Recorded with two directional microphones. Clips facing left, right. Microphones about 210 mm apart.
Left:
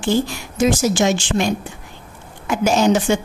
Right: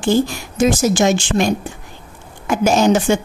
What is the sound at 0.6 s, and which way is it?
A woman's voice, 50° right (ahead or behind).